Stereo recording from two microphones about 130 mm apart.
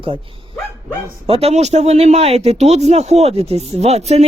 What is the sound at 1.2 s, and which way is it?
Speech, 45° right (ahead or behind).